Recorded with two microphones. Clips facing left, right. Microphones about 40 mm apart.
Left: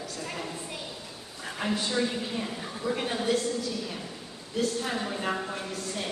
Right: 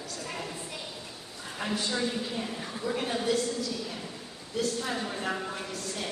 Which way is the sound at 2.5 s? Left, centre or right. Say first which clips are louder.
Left 2 dB; centre.